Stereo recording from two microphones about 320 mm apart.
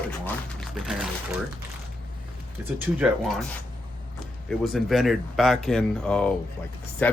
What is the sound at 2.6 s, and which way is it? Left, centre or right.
Speech, centre.